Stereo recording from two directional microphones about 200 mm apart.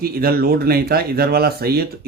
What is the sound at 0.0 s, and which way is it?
Speech, 50° right (ahead or behind).